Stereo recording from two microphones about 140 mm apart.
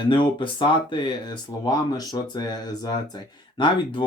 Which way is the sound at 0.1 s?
35° left (ahead or behind).